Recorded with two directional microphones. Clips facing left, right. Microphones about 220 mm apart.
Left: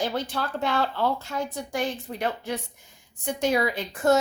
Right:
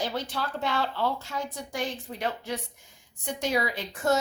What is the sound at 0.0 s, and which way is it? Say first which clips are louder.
Speech: left 3 dB; 55° left (ahead or behind).